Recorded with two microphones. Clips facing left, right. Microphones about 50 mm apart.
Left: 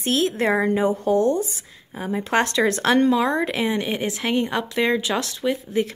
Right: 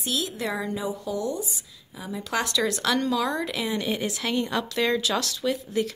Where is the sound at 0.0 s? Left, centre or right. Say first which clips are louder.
Left 8 dB; left.